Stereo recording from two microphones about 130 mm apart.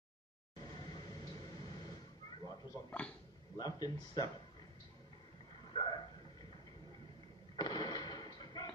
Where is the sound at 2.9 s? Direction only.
10° left (ahead or behind).